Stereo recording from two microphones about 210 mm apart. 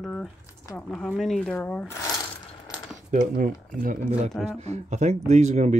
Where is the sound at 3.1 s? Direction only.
40° right (ahead or behind).